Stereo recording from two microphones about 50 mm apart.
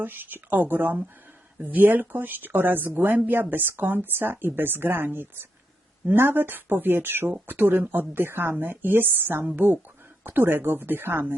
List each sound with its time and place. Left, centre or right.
0.0 s speech: right